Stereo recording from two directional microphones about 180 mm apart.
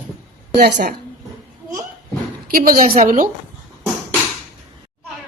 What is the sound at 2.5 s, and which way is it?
Speech, 55° right (ahead or behind).